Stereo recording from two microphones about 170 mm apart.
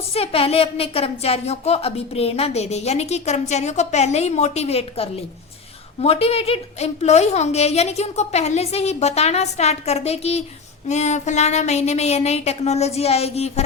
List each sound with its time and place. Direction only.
0.1 s a woman's voice: 35° left (ahead or behind)